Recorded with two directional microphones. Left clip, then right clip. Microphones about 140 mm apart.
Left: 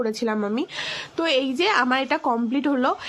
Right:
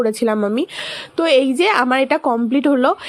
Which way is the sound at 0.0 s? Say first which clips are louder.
Right 7 dB; 45° right (ahead or behind).